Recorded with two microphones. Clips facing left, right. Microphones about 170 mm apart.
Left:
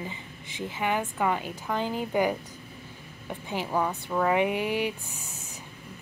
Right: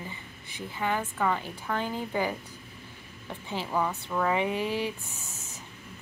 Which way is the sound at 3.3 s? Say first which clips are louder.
Left 2 dB; 15° left (ahead or behind).